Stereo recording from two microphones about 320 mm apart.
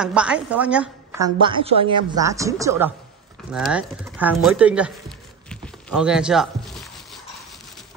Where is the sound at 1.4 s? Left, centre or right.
Centre.